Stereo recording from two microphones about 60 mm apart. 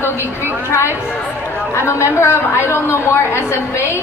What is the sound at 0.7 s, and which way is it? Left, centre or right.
A woman's voice, left.